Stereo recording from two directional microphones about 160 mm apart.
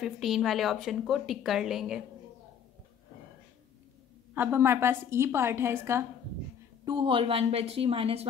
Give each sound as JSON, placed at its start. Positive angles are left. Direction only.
{"t": 0.0, "sound": "a woman's voice", "side_deg": 0}
{"t": 4.3, "sound": "a woman's voice", "side_deg": -15}
{"t": 6.8, "sound": "a woman's voice", "side_deg": -30}